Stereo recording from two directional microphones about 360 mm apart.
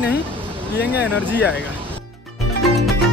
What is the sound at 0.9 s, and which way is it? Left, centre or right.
Speech, centre.